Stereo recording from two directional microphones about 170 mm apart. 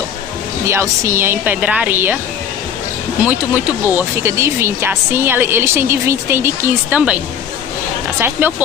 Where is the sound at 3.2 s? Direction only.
10° right (ahead or behind).